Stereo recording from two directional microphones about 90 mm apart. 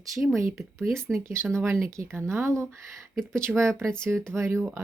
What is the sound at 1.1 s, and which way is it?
Speech, 30° right (ahead or behind).